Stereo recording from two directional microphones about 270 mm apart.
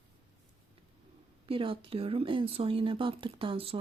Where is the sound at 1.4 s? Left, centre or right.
Centre.